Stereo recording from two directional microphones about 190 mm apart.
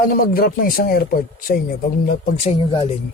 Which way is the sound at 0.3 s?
50° left (ahead or behind).